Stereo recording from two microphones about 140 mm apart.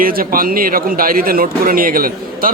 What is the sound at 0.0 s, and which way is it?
Speech, 90° right.